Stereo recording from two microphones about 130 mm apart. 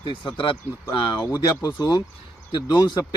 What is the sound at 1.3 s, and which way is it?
A man's voice, 30° left (ahead or behind).